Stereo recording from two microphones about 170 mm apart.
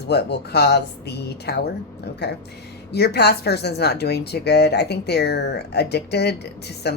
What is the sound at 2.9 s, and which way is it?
Speech, 75° left (ahead or behind).